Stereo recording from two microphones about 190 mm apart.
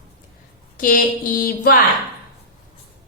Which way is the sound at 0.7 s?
45° left (ahead or behind).